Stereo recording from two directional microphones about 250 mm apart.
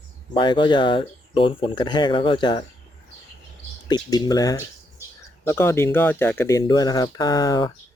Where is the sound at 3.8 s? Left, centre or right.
Centre.